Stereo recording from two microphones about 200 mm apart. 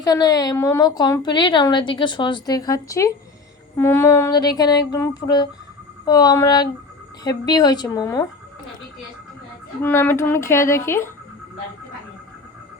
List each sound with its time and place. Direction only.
0.0 s a woman's voice: 20° left (ahead or behind)
9.8 s speech: 10° left (ahead or behind)